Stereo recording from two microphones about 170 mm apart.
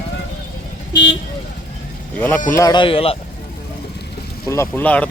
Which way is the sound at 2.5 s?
20° left (ahead or behind).